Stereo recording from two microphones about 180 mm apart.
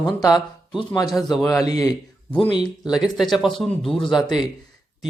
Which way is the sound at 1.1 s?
Centre (ahead or behind).